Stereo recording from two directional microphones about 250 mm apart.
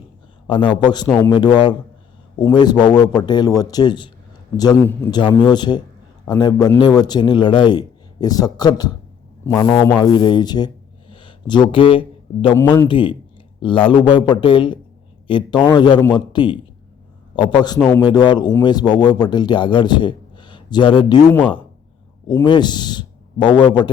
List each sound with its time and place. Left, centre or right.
0.4 s a man's voice: centre
22.3 s a man's voice: centre